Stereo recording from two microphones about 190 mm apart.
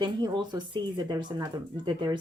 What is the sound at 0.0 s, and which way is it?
Speech, 25° right (ahead or behind).